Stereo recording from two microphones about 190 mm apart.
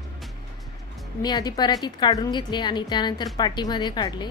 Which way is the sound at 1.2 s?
20° left (ahead or behind).